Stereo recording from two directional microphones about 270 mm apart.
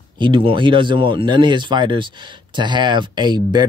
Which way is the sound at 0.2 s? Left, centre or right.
Centre.